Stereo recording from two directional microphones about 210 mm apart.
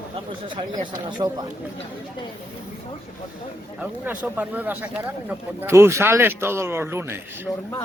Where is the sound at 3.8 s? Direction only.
5° right (ahead or behind).